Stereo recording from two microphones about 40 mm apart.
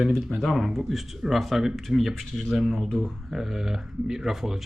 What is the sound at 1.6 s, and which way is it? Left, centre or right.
Speech, centre.